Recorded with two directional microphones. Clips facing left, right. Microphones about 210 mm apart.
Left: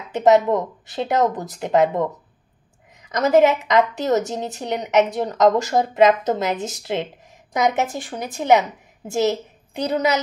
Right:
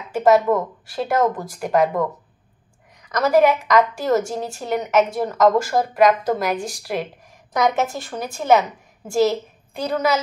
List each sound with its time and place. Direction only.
0.1 s a woman's voice: 20° left (ahead or behind)